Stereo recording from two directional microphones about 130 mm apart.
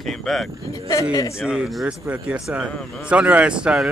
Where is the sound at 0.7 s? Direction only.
25° left (ahead or behind).